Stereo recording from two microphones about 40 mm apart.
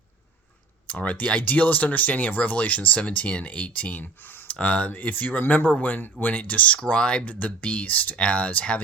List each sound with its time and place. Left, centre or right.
0.9 s speech: left
4.0 s speech: left
4.4 s speech: left
4.9 s speech: left
6.8 s speech: left
7.3 s speech: left
8.1 s speech: left